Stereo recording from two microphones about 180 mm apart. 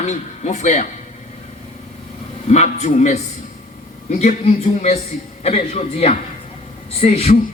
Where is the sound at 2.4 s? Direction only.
40° left (ahead or behind).